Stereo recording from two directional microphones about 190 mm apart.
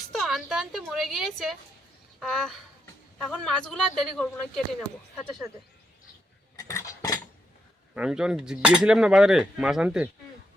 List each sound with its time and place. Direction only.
0.1 s a woman's voice: centre (ahead or behind)
6.6 s cutlery: 15° left (ahead or behind)
7.9 s speech: 5° right (ahead or behind)